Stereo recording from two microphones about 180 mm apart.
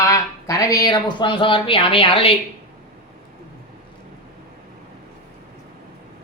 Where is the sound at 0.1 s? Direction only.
20° left (ahead or behind).